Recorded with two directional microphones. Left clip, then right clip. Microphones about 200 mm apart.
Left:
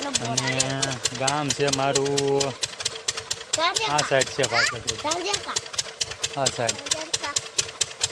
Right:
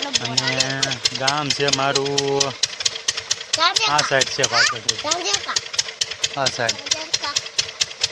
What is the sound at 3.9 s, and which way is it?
Speech, 20° right (ahead or behind).